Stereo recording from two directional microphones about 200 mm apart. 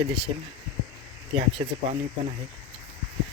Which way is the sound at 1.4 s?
25° right (ahead or behind).